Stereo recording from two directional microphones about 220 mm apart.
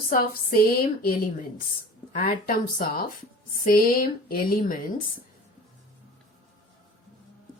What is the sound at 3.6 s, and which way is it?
A woman's voice, 40° left (ahead or behind).